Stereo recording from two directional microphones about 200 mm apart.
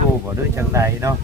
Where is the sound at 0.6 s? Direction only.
15° right (ahead or behind).